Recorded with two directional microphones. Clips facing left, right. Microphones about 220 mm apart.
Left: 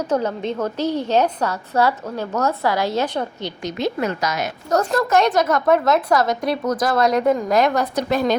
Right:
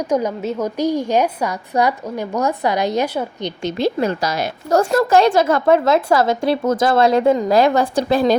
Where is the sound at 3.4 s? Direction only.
20° right (ahead or behind).